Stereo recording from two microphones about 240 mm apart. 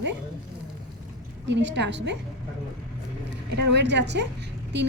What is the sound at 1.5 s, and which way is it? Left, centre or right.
Speech, right.